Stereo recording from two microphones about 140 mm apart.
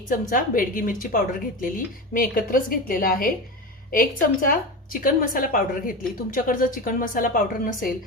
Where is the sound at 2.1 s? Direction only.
90° left.